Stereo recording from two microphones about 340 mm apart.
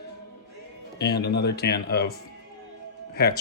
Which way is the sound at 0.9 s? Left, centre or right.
Left.